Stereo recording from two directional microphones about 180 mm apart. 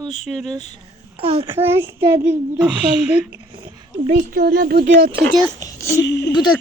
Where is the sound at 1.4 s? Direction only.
15° right (ahead or behind).